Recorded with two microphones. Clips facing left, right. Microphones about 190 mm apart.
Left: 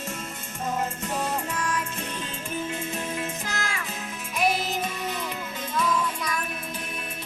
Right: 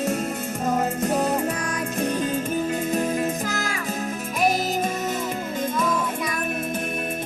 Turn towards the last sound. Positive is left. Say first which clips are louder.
# right 2 dB
turn(degrees=-50)  # may be behind; listen again after turning